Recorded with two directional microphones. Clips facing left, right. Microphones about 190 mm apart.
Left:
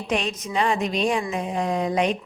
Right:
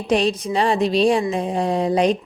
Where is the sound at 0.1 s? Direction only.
35° right (ahead or behind).